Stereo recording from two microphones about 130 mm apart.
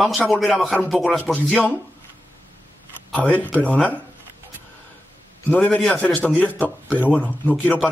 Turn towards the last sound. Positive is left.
turn(degrees=10)  # may be behind; listen again after turning